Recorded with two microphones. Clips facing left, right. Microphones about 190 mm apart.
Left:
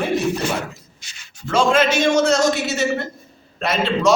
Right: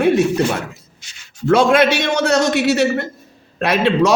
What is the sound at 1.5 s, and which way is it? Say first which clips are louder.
A man's voice: right 4 dB; 60° right (ahead or behind).